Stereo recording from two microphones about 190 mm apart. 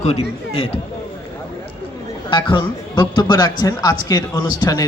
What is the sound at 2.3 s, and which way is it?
A man's voice, 25° left (ahead or behind).